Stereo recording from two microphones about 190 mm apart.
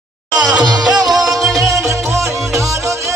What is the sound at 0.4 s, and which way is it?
Music, 20° right (ahead or behind).